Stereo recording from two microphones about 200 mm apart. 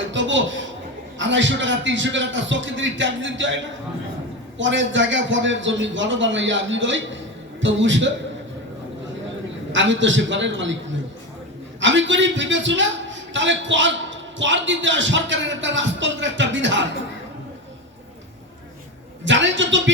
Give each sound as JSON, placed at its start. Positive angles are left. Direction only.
{"t": 0.0, "sound": "a sound", "side_deg": -65}
{"t": 1.2, "sound": "a man's voice", "side_deg": -65}
{"t": 9.7, "sound": "a man's voice", "side_deg": -65}
{"t": 11.8, "sound": "a man's voice", "side_deg": -65}
{"t": 19.2, "sound": "a man's voice", "side_deg": -65}